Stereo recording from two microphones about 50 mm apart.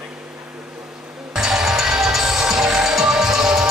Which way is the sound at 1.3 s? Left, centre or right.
Centre.